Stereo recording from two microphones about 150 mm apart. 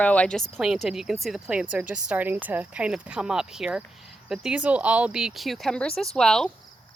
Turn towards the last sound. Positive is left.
turn(degrees=5)  # may be behind; listen again after turning